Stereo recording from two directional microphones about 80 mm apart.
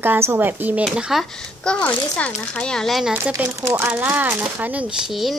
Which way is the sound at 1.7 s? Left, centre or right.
Centre.